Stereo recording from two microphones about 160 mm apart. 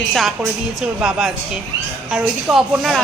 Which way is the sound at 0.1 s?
Centre (ahead or behind).